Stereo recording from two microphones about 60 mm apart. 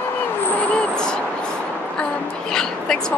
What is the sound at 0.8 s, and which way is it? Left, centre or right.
Speech, centre.